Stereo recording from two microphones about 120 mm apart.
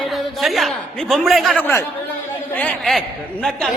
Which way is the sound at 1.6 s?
20° left (ahead or behind).